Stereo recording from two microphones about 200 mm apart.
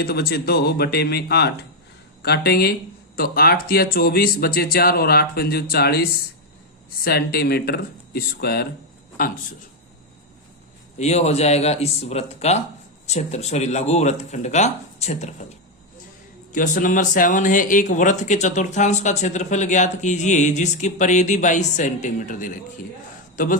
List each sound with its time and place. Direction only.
0.0 s a man's voice: 50° left (ahead or behind)
10.9 s speech: 35° left (ahead or behind)
16.5 s speech: 40° left (ahead or behind)